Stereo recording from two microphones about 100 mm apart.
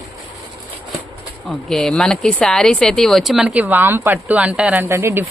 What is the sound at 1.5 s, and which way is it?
A woman's voice, 5° left (ahead or behind).